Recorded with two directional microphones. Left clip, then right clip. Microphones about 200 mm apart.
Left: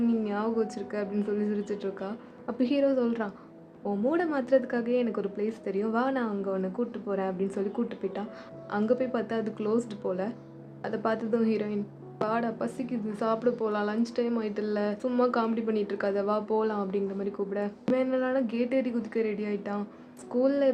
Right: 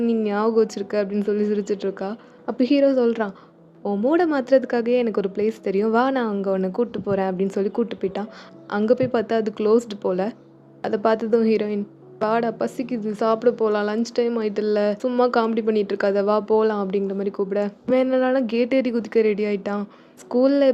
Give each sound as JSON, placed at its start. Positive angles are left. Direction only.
{"t": 0.1, "sound": "a woman's voice", "side_deg": -45}